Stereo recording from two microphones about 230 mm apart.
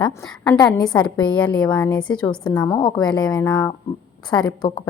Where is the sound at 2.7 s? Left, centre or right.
Centre.